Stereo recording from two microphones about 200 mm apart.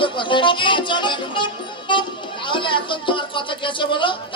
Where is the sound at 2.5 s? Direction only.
25° left (ahead or behind).